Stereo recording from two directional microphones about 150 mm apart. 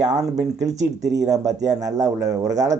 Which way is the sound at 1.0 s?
25° right (ahead or behind).